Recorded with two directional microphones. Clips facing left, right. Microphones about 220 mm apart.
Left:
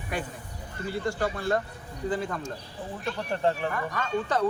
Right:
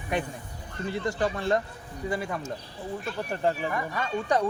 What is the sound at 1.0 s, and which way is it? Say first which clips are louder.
A man's voice: right 1 dB; 20° right (ahead or behind).